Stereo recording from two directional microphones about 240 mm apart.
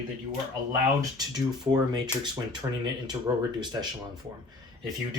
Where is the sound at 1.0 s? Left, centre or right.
Centre.